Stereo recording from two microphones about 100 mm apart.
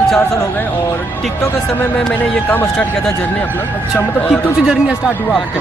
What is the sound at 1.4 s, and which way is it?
Speech, 25° left (ahead or behind).